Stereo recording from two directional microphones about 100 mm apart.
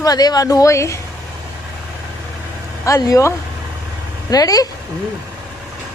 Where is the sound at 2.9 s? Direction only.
35° left (ahead or behind).